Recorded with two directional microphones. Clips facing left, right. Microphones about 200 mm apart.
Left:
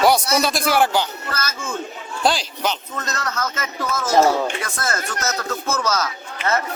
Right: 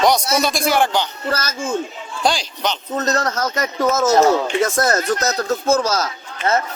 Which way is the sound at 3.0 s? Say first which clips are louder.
Right 6 dB; 35° right (ahead or behind).